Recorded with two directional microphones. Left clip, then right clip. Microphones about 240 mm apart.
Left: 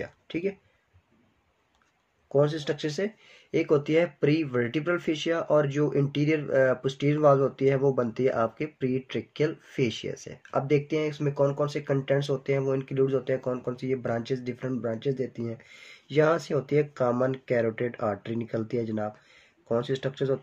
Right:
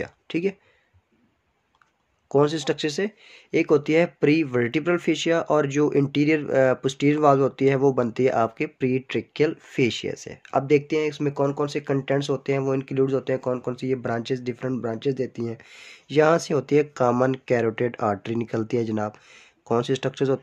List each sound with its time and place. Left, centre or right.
0.0 s speech: right
2.2 s speech: right